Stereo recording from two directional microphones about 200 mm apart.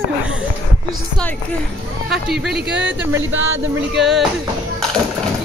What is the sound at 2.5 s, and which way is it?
Speech, 60° right (ahead or behind).